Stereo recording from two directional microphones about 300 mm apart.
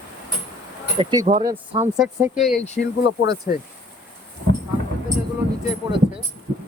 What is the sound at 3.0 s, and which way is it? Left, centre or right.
Speech, left.